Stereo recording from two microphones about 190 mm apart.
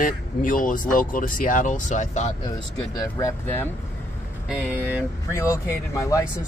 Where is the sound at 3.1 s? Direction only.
15° left (ahead or behind).